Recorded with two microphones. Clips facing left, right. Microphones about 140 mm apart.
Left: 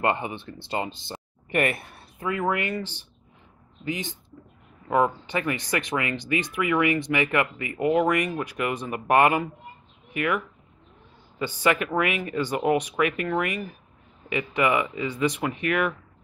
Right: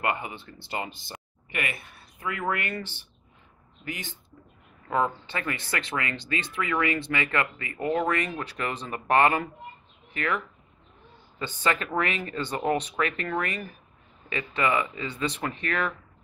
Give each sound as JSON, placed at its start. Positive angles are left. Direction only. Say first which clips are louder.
{"t": 0.0, "sound": "speech", "louder": "left 4 dB", "side_deg": 25}
{"t": 1.5, "sound": "speech", "louder": "left 9 dB", "side_deg": 45}
{"t": 2.1, "sound": "speech", "louder": "left 4 dB", "side_deg": 20}